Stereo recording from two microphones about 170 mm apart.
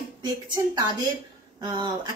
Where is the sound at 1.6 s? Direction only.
20° right (ahead or behind).